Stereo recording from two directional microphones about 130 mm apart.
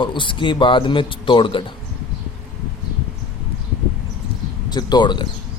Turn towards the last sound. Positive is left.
turn(degrees=35)  # may be behind; listen again after turning